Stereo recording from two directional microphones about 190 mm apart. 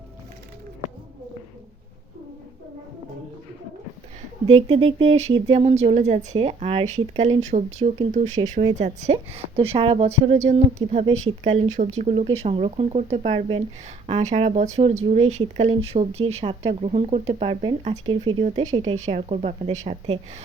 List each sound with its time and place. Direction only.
4.4 s speech: 30° right (ahead or behind)